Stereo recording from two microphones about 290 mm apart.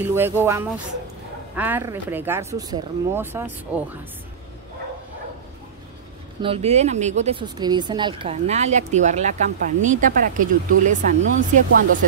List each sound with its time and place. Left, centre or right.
0.0 s speech: centre
6.4 s speech: right